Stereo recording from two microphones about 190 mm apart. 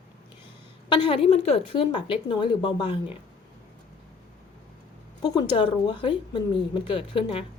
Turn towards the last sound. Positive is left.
turn(degrees=30)  # may be behind; listen again after turning